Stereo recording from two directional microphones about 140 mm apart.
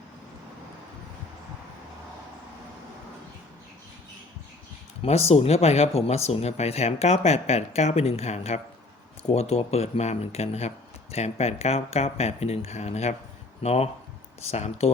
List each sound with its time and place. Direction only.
5.0 s speech: 50° left (ahead or behind)